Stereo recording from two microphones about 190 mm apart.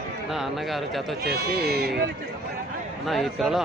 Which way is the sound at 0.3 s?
Centre (ahead or behind).